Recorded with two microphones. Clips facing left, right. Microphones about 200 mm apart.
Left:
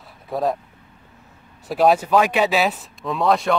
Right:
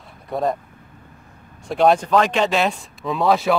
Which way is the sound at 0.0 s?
Centre (ahead or behind).